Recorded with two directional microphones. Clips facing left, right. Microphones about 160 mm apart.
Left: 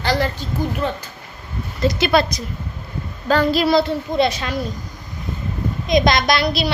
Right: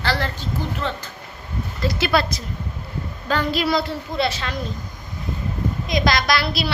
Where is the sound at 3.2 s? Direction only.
35° left (ahead or behind).